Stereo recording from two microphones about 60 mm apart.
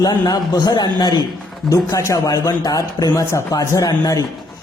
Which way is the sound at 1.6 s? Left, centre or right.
Left.